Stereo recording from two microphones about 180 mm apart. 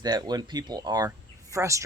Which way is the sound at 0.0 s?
20° right (ahead or behind).